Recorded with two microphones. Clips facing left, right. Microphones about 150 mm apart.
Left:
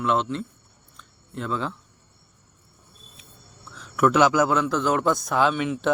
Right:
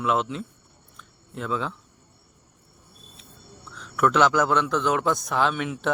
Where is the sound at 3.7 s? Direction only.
5° left (ahead or behind).